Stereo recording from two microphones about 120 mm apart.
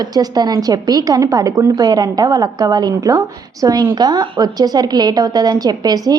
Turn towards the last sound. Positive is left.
turn(degrees=-35)  # may be behind; listen again after turning